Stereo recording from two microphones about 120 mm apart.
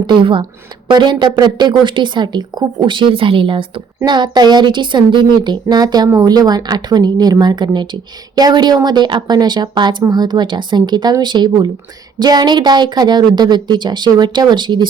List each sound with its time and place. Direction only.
0.1 s speech: 45° right (ahead or behind)